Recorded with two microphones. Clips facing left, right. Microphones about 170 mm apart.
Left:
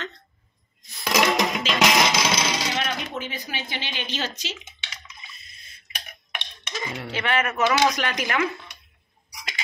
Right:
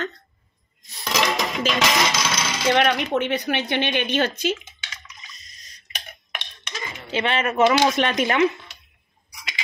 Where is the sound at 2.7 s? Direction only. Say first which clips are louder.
Right 9 dB; 65° right (ahead or behind).